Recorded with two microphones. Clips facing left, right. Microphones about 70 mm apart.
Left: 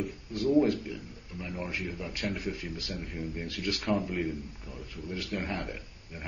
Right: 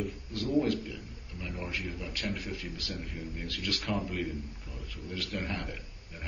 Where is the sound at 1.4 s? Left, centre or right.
Left.